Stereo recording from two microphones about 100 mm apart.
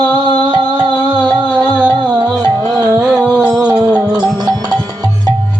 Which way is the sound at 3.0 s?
10° right (ahead or behind).